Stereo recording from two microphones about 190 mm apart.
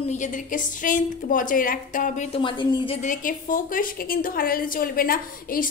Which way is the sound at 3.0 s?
45° left (ahead or behind).